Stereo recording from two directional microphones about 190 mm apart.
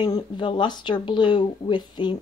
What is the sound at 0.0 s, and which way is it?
Speech, 25° left (ahead or behind).